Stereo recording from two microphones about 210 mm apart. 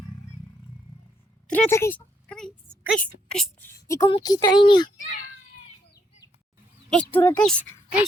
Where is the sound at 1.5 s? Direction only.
10° left (ahead or behind).